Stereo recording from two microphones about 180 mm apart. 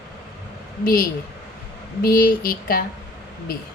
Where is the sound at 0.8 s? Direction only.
50° left (ahead or behind).